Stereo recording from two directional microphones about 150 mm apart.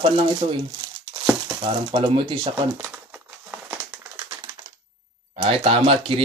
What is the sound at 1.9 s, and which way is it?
Speech, 30° right (ahead or behind).